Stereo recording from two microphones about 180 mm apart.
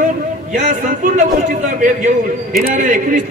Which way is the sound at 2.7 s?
45° right (ahead or behind).